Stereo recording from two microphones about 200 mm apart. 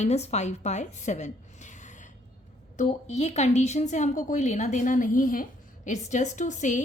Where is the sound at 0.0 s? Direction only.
35° left (ahead or behind).